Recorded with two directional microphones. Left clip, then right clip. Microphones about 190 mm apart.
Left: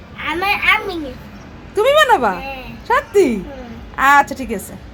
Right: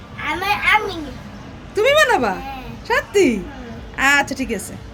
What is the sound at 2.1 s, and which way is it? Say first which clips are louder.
Speech: left 3 dB; 15° right (ahead or behind).